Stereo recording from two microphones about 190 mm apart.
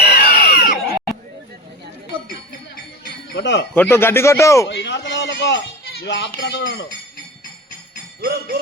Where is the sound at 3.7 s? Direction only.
10° left (ahead or behind).